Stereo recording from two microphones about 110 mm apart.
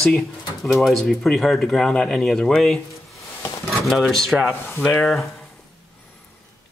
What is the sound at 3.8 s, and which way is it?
Speech, centre (ahead or behind).